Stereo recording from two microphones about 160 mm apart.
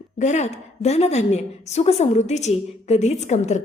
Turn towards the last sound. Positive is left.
turn(degrees=45)  # may be behind; listen again after turning